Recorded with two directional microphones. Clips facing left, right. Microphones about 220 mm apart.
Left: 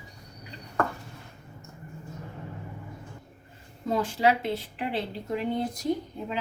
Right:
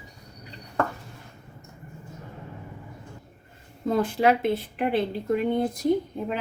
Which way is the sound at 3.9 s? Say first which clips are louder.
Right 3 dB; 55° right (ahead or behind).